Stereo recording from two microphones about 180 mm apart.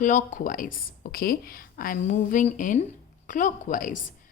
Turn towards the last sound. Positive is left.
turn(degrees=45)  # may be behind; listen again after turning